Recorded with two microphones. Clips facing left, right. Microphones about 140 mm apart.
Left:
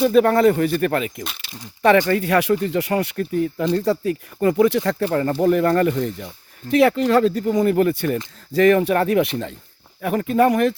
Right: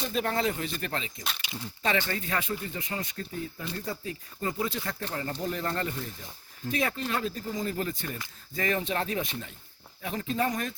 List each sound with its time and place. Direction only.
0.1 s speech: 55° left (ahead or behind)
2.1 s speech: 75° left (ahead or behind)
10.0 s speech: 60° left (ahead or behind)